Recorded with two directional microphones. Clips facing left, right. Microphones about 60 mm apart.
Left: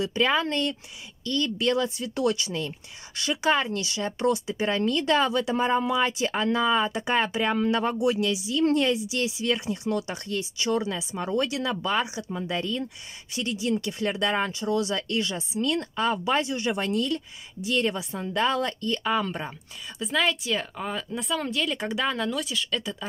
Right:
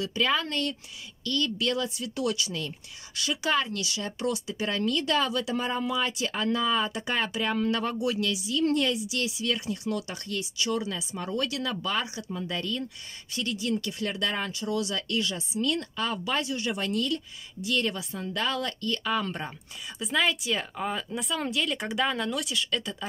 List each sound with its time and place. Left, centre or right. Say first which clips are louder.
0.0 s speech: left 3 dB; left; by 23.0 s centre